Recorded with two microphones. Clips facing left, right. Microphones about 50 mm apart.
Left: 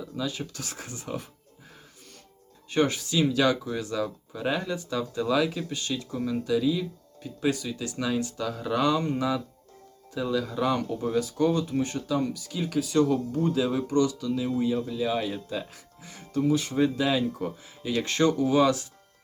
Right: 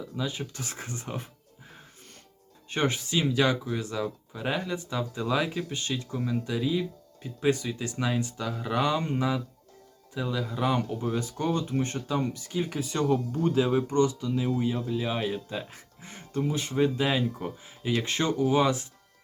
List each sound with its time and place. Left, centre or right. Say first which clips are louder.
0.2 s speech: left 1 dB; right
2.6 s speech: left 3 dB; right
8.4 s speech: left 2 dB; centre
10.8 s speech: left 3 dB; right